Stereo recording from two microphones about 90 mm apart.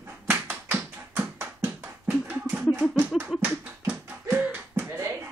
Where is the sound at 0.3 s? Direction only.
25° right (ahead or behind).